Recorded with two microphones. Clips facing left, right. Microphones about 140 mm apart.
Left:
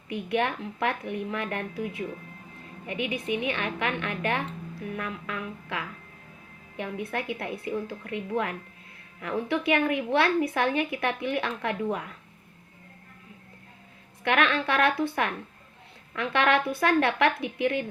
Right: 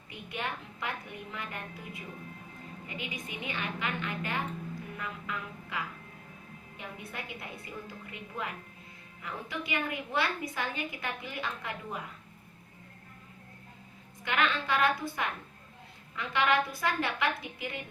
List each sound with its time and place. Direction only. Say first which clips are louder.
0.1 s a woman's voice: left 11 dB; 70° left (ahead or behind)
3.3 s a woman's voice: left 6 dB; 70° left (ahead or behind)
4.9 s music: left 6 dB; 85° left
6.7 s a woman's voice: left 11 dB; 75° left (ahead or behind)
7.3 s music: left 11 dB; 80° left
9.2 s a woman's voice: left 12 dB; 70° left (ahead or behind)
14.3 s a woman's voice: left 5 dB; 70° left (ahead or behind)